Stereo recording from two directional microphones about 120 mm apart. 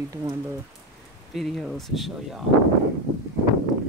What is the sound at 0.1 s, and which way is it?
Speech, 30° right (ahead or behind).